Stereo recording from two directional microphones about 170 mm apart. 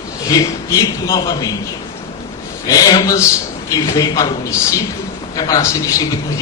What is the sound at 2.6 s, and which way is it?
A man's voice, 20° left (ahead or behind).